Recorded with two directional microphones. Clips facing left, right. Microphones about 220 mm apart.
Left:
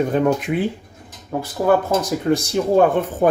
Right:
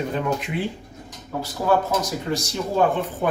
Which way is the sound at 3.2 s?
45° left (ahead or behind).